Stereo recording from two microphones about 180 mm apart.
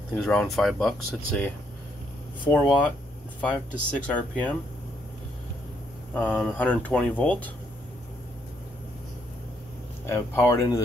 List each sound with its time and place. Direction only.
0.2 s speech: centre (ahead or behind)
2.5 s speech: 15° left (ahead or behind)
6.1 s speech: 5° left (ahead or behind)
10.0 s speech: 15° left (ahead or behind)